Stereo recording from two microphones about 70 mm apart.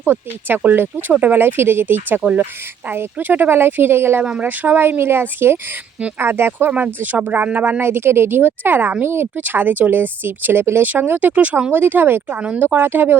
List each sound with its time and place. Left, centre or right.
0.0 s speech: right
4.2 s speech: centre; by 6.7 s right
6.7 s speech: right
11.7 s speech: right
12.4 s speech: centre
12.7 s speech: right